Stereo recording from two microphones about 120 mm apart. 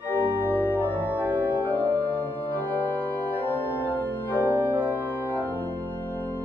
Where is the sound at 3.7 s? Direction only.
15° right (ahead or behind).